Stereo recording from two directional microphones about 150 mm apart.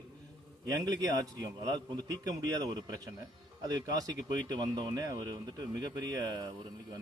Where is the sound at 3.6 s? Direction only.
25° right (ahead or behind).